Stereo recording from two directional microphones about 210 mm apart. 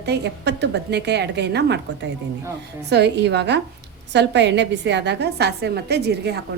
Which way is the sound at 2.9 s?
55° right (ahead or behind).